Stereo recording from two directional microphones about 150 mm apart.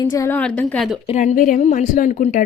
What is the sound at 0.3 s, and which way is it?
Speech, 10° left (ahead or behind).